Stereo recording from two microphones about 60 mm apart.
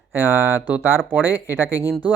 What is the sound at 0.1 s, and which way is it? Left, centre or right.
Speech, right.